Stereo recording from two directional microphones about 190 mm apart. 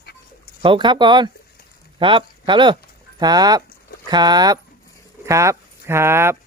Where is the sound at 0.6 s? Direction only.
25° right (ahead or behind).